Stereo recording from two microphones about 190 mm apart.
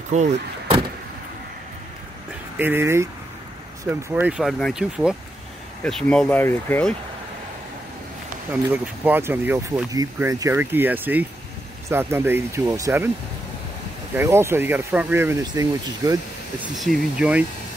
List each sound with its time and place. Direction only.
0.1 s speech: 35° right (ahead or behind)
2.6 s speech: 10° right (ahead or behind); by 7.0 s 10° left (ahead or behind)
8.6 s speech: 10° right (ahead or behind)
14.1 s speech: 15° right (ahead or behind)
16.7 s speech: centre (ahead or behind)